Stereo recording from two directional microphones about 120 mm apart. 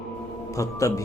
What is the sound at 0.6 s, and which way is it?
Speech, 25° left (ahead or behind).